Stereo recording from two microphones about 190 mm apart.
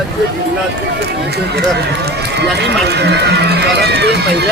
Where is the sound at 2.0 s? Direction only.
60° right (ahead or behind).